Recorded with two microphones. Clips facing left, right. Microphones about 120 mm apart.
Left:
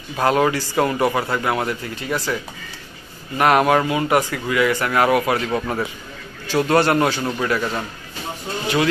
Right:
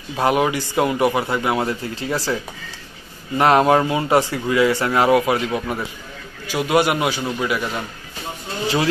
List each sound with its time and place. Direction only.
0.1 s speech: 20° right (ahead or behind)
5.7 s a man's voice: 10° right (ahead or behind)